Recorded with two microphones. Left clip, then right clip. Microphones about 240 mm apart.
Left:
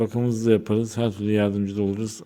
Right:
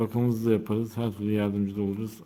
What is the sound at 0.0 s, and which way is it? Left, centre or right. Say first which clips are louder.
Speech: left 4 dB; centre.